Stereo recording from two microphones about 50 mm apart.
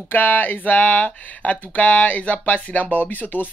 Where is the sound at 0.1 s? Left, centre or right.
Left.